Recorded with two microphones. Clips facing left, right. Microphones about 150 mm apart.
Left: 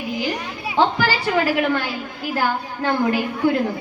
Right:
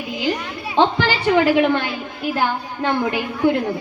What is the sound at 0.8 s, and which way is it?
A woman's voice, 20° right (ahead or behind).